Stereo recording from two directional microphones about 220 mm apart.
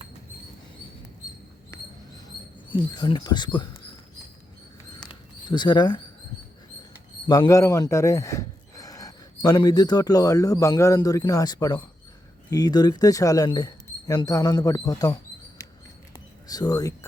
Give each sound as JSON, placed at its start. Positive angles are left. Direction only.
{"t": 2.6, "sound": "speech", "side_deg": 20}
{"t": 5.0, "sound": "mouse", "side_deg": 20}
{"t": 7.3, "sound": "speech", "side_deg": 15}